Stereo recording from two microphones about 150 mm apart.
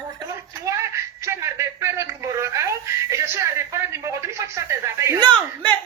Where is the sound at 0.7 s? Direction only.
20° right (ahead or behind).